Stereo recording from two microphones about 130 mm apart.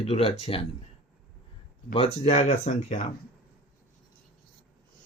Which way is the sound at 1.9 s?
50° left (ahead or behind).